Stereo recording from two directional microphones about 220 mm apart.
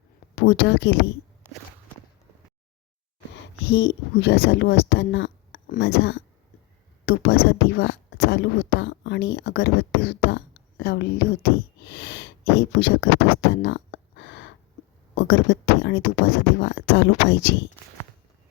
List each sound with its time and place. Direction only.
0.3 s speech: 50° left (ahead or behind)
3.7 s speech: 50° left (ahead or behind)